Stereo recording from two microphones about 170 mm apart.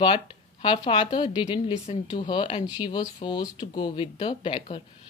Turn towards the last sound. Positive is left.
turn(degrees=30)  # may be behind; listen again after turning